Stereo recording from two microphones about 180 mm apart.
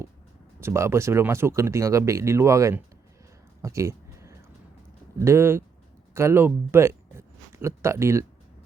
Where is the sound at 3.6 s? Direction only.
15° right (ahead or behind).